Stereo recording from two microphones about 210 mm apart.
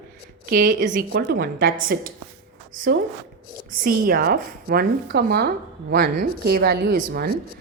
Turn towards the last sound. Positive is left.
turn(degrees=-50)  # may be behind; listen again after turning